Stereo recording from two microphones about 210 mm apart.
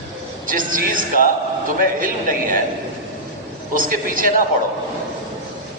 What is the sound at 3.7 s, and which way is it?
Speech, 40° right (ahead or behind).